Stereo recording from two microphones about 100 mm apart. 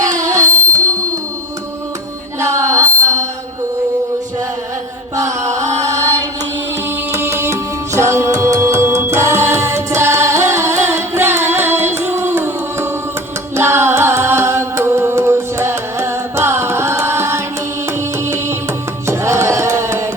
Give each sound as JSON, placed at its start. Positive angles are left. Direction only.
{"t": 0.0, "sound": "a sound", "side_deg": -35}
{"t": 2.4, "sound": "music", "side_deg": -30}
{"t": 5.1, "sound": "mantra", "side_deg": -30}
{"t": 7.1, "sound": "music", "side_deg": -25}
{"t": 13.6, "sound": "singing", "side_deg": -25}
{"t": 19.0, "sound": "music", "side_deg": -25}